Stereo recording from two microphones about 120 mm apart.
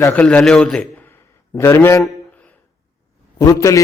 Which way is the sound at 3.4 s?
25° left (ahead or behind).